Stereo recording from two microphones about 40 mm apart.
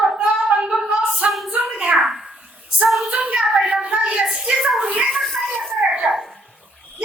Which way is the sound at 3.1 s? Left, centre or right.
Right.